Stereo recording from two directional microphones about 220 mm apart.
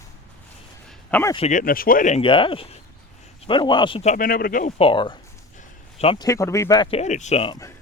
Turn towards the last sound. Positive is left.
turn(degrees=20)  # may be behind; listen again after turning